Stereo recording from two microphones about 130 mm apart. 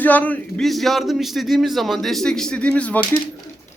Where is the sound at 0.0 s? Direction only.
15° left (ahead or behind).